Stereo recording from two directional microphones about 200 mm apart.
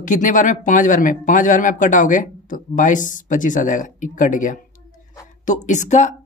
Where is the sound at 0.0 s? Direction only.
40° left (ahead or behind).